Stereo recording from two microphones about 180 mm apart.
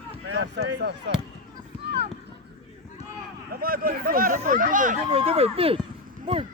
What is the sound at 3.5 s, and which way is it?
Speech, 55° right (ahead or behind).